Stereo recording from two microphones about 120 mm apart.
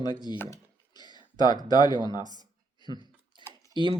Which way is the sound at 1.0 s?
35° left (ahead or behind).